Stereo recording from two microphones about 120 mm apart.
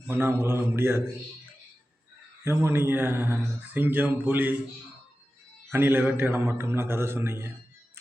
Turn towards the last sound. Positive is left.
turn(degrees=-20)  # may be behind; listen again after turning